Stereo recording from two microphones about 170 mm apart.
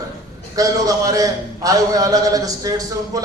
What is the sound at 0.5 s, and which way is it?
A man's voice, 20° right (ahead or behind).